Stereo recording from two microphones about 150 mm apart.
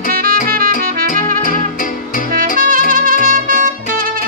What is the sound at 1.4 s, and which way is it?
Music, 65° left (ahead or behind).